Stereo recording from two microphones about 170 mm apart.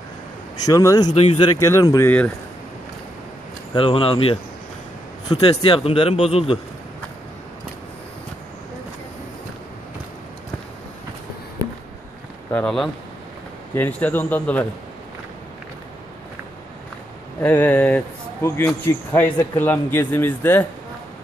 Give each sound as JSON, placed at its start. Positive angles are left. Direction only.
{"t": 0.7, "sound": "speech", "side_deg": 20}
{"t": 1.1, "sound": "a man's voice", "side_deg": 35}
{"t": 1.6, "sound": "speech", "side_deg": 20}
{"t": 3.7, "sound": "a man's voice", "side_deg": 35}
{"t": 12.4, "sound": "speech", "side_deg": 5}
{"t": 17.4, "sound": "speech", "side_deg": 10}